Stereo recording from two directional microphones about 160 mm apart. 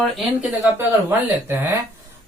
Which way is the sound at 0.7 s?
15° right (ahead or behind).